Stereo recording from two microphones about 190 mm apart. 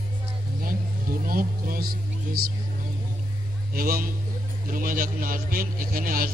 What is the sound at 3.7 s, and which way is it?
A man's voice, 50° right (ahead or behind).